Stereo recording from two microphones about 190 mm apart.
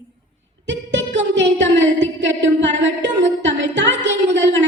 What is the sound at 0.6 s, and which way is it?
Singing, 70° right (ahead or behind).